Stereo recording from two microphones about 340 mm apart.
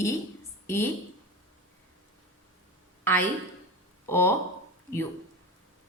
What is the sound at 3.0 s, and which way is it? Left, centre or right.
A woman's voice, centre.